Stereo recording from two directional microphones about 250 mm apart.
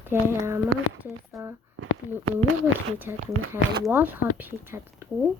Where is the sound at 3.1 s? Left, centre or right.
Centre.